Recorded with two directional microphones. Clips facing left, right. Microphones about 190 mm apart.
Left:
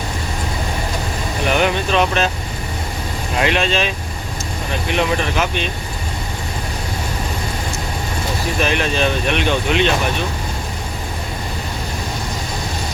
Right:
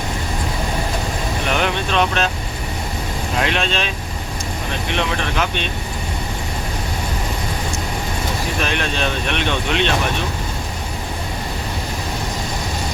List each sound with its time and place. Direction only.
1.5 s vehicle: 5° left (ahead or behind)
3.4 s speech: 5° left (ahead or behind)
4.9 s speech: 5° left (ahead or behind)
8.6 s speech: 5° left (ahead or behind)